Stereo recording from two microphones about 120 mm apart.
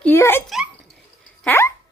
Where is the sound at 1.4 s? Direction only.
15° left (ahead or behind).